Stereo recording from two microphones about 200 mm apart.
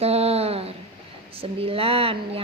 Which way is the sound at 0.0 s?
30° right (ahead or behind).